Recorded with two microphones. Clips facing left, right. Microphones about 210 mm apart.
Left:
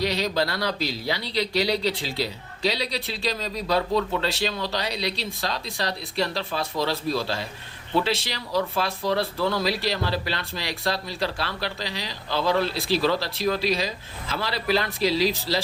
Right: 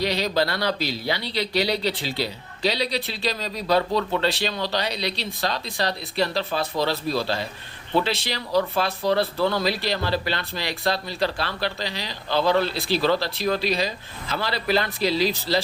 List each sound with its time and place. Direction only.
0.0 s speech: centre (ahead or behind)